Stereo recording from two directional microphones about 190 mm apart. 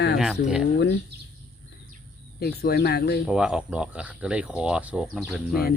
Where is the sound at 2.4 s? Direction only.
55° left (ahead or behind).